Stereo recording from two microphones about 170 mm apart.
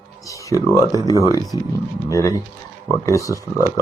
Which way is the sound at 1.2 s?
20° left (ahead or behind).